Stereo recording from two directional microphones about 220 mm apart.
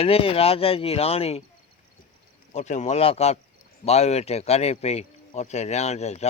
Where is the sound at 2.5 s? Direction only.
30° left (ahead or behind).